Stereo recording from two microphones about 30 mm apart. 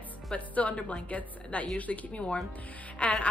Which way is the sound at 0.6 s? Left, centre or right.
Left.